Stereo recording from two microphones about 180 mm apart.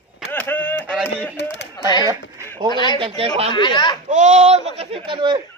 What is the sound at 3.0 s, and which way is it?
Speech, 30° right (ahead or behind).